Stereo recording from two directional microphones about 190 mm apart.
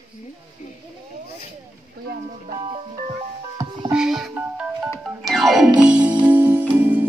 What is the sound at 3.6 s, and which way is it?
Music, 15° right (ahead or behind).